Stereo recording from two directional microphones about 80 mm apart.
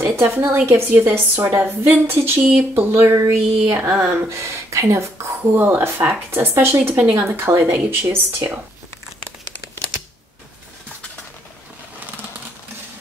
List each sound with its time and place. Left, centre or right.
0.1 s a woman's voice: right
3.7 s a woman's voice: right